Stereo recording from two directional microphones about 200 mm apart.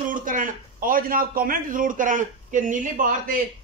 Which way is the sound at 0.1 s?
40° right (ahead or behind).